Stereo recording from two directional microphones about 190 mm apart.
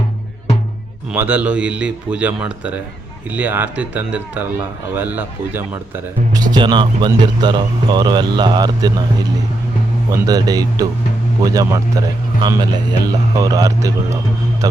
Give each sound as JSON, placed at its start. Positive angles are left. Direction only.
{"t": 1.1, "sound": "speech", "side_deg": -10}
{"t": 6.3, "sound": "speech", "side_deg": -20}
{"t": 10.1, "sound": "speech", "side_deg": -20}